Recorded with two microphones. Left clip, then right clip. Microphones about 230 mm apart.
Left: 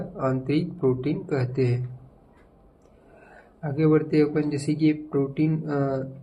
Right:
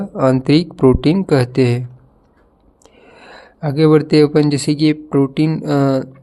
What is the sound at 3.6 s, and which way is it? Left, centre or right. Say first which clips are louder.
Speech: right 10 dB; right.